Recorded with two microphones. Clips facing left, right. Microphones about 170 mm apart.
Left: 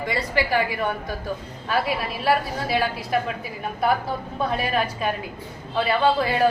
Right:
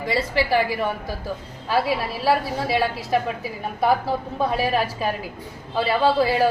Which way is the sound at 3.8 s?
30° right (ahead or behind).